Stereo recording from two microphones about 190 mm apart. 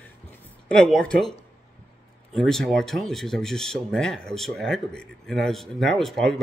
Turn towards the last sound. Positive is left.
turn(degrees=0)  # may be behind; listen again after turning